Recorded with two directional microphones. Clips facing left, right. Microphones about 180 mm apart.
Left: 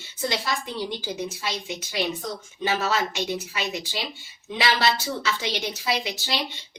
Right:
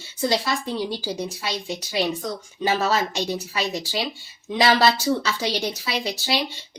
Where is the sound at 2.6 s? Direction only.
35° right (ahead or behind).